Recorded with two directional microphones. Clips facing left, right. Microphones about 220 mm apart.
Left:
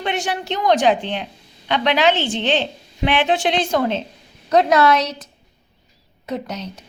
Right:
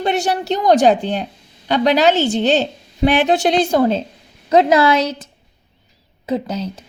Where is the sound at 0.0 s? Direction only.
40° right (ahead or behind).